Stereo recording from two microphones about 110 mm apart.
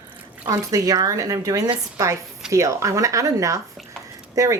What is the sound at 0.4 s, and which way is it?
A woman's voice, 35° right (ahead or behind).